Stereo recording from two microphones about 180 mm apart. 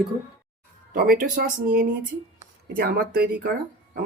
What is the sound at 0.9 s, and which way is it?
Speech, 55° right (ahead or behind).